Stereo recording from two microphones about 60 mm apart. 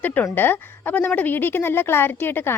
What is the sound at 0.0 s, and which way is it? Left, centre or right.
A woman's voice, left.